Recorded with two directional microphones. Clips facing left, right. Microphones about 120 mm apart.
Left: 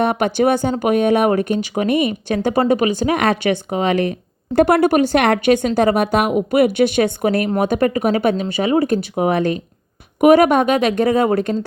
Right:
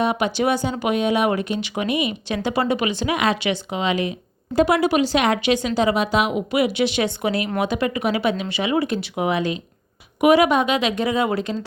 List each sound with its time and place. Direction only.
0.0 s speech: 55° left (ahead or behind)